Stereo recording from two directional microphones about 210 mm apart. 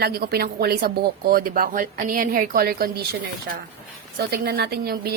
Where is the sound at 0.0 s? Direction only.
50° right (ahead or behind).